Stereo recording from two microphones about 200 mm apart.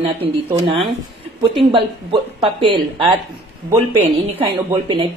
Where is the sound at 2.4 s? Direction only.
25° right (ahead or behind).